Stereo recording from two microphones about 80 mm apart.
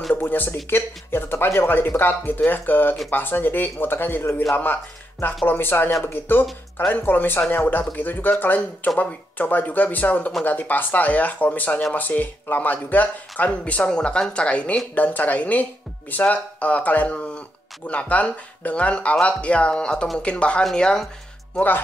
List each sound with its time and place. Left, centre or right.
0.1 s speech: left
5.5 s speech: left; by 21.1 s centre
21.5 s speech: left